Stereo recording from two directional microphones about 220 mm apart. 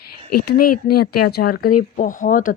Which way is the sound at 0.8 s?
45° left (ahead or behind).